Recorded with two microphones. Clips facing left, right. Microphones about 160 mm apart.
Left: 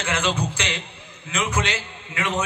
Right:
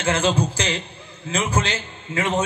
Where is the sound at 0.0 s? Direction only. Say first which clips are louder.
Right 4 dB; 30° right (ahead or behind).